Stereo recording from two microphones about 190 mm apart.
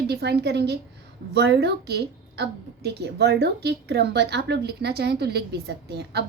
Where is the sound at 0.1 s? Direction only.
60° right (ahead or behind).